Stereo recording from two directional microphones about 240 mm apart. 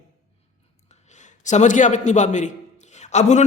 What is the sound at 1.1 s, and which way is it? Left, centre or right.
A man's voice, left.